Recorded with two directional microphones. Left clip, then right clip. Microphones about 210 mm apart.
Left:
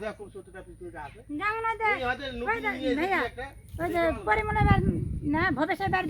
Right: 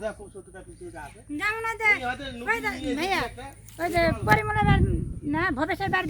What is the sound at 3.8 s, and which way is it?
Speech, 45° left (ahead or behind).